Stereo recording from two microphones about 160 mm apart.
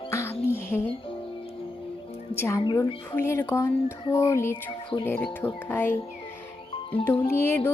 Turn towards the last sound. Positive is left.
turn(degrees=15)  # may be behind; listen again after turning